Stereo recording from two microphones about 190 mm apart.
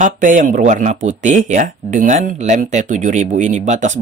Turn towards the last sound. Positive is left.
turn(degrees=-40)  # may be behind; listen again after turning